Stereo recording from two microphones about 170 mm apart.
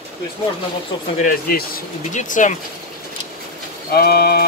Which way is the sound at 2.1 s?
50° left (ahead or behind).